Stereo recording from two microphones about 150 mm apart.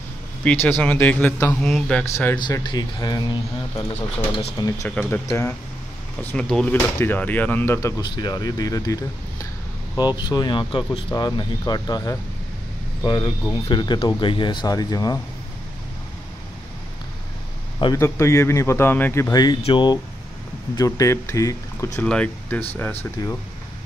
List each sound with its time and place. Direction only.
0.4 s speech: 10° left (ahead or behind)
2.0 s speech: 15° left (ahead or behind)
2.3 s speech: 30° left (ahead or behind)
4.8 s speech: 10° left (ahead or behind)
6.2 s speech: 5° left (ahead or behind)
8.0 s speech: 30° left (ahead or behind)
17.9 s speech: 20° left (ahead or behind)
22.0 s speech: 10° left (ahead or behind)